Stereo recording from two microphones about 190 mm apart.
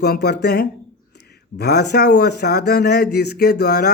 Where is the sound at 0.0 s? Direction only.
60° left (ahead or behind).